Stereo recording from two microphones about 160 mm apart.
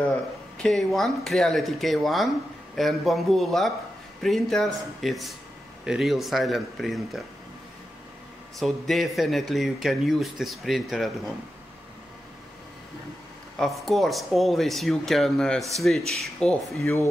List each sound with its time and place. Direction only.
0.1 s speech: 5° left (ahead or behind)
8.5 s speech: centre (ahead or behind)
13.6 s speech: centre (ahead or behind)
16.8 s speech: 20° left (ahead or behind)